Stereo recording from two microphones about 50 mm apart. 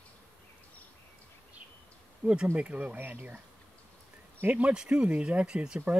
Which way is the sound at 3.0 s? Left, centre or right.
Right.